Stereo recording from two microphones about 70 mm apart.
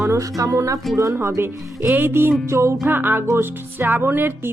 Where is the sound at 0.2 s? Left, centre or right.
Right.